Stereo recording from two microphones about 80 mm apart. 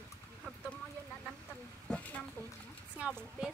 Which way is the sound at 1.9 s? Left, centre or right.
Centre.